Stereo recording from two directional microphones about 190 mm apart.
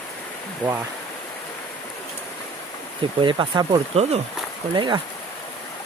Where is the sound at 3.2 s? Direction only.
25° right (ahead or behind).